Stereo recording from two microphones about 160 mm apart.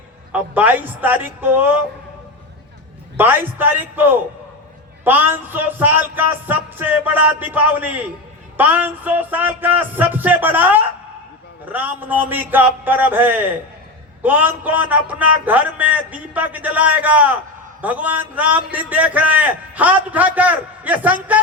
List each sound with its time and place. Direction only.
0.3 s a man's voice: 10° right (ahead or behind)
3.2 s a man's voice: 10° right (ahead or behind)